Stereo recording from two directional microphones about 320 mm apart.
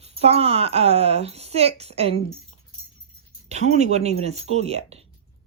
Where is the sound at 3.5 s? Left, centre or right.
Right.